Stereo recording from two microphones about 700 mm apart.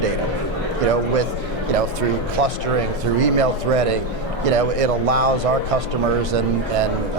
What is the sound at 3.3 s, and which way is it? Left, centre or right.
Speech, right.